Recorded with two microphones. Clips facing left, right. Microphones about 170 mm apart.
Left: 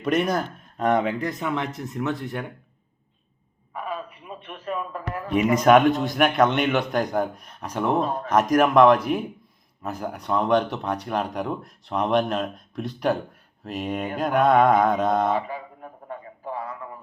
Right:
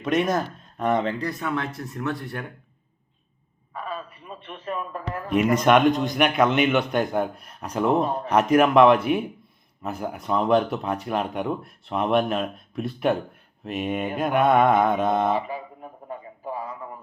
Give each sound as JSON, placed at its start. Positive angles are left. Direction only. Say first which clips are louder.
{"t": 0.0, "sound": "speech", "louder": "even", "side_deg": 0}
{"t": 1.0, "sound": "speech", "louder": "left 1 dB", "side_deg": 15}
{"t": 3.8, "sound": "a sound", "louder": "left 2 dB", "side_deg": 15}
{"t": 4.6, "sound": "speech", "louder": "left 1 dB", "side_deg": 0}
{"t": 7.9, "sound": "speech", "louder": "right 1 dB", "side_deg": -25}
{"t": 8.5, "sound": "speech", "louder": "even", "side_deg": -5}
{"t": 14.8, "sound": "a sound", "louder": "even", "side_deg": 0}